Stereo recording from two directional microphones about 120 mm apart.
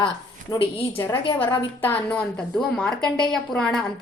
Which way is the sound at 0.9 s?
20° left (ahead or behind).